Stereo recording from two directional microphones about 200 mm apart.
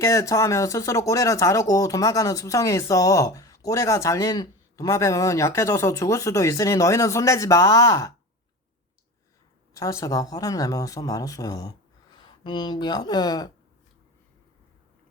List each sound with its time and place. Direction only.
0.0 s speech: 15° left (ahead or behind)
9.7 s speech: 15° left (ahead or behind)